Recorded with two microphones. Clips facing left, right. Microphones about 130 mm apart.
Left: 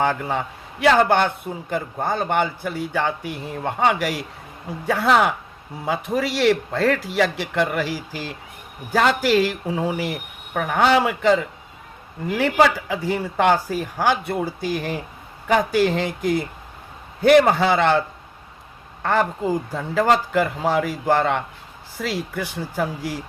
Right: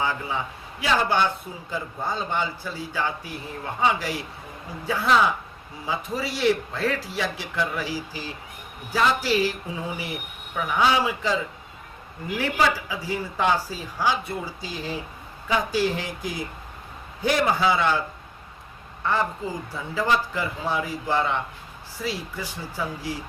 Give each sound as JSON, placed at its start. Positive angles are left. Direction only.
{"t": 0.0, "sound": "a man's voice", "side_deg": 65}
{"t": 7.2, "sound": "speech", "side_deg": 70}
{"t": 12.4, "sound": "speech", "side_deg": 80}
{"t": 19.0, "sound": "a woman's voice", "side_deg": 80}